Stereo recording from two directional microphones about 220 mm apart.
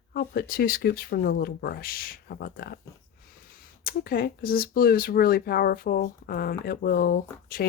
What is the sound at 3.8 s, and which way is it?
Speech, 40° left (ahead or behind).